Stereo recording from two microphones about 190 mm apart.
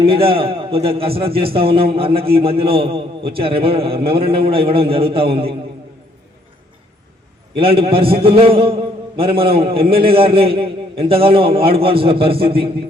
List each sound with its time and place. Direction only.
0.0 s a man's voice: 30° right (ahead or behind)
7.5 s a man's voice: 30° right (ahead or behind)